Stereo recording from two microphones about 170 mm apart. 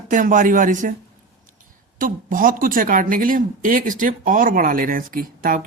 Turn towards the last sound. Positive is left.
turn(degrees=-55)  # may be behind; listen again after turning